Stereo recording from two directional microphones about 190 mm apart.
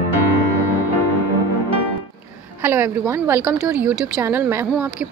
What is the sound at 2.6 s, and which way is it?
Speech, 10° right (ahead or behind).